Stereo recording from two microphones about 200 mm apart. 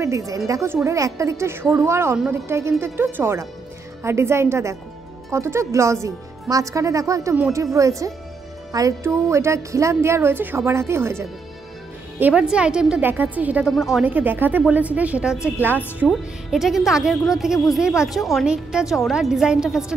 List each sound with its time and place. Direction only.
0.0 s a woman's voice: 15° right (ahead or behind)